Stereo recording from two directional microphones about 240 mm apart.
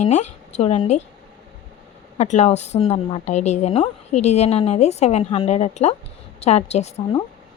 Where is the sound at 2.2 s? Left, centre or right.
Left.